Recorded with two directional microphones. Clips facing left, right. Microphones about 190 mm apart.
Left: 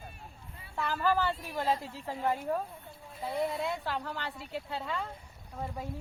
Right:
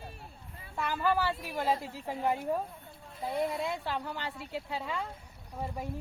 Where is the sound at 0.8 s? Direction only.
10° right (ahead or behind).